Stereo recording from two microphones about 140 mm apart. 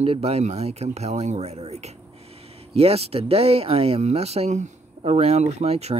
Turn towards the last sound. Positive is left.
turn(degrees=-50)  # may be behind; listen again after turning